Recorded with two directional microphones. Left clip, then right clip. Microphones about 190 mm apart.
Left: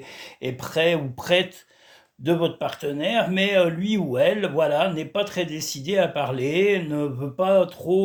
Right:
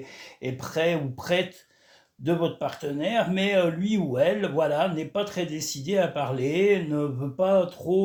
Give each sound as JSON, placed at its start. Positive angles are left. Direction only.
{"t": 0.4, "sound": "speech", "side_deg": 35}